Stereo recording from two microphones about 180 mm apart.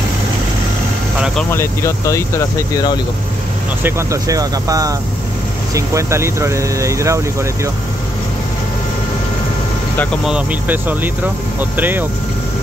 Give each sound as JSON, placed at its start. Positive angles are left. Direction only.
{"t": 1.5, "sound": "speech", "side_deg": 15}
{"t": 3.8, "sound": "speech", "side_deg": -20}
{"t": 10.2, "sound": "speech", "side_deg": -5}